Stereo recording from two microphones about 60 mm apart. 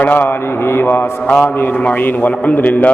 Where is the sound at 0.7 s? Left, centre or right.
Left.